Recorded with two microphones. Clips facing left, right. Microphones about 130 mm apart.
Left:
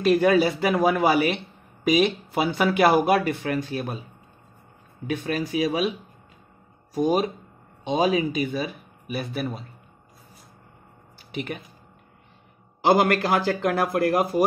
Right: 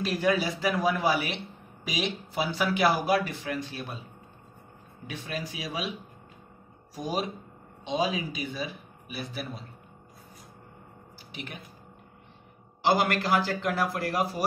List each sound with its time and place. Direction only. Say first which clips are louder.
0.0 s speech: left 8 dB; 60° left (ahead or behind)
5.0 s speech: left 9 dB; 55° left (ahead or behind)
7.0 s speech: left 9 dB; 55° left (ahead or behind)
11.3 s speech: left 10 dB; 60° left (ahead or behind)
12.8 s a man's voice: left 6 dB; 50° left (ahead or behind)